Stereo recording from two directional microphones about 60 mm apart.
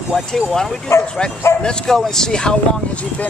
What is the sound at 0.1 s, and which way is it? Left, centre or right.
Speech, centre.